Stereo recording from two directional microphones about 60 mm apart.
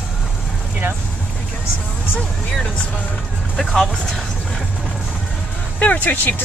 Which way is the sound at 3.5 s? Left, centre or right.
Centre.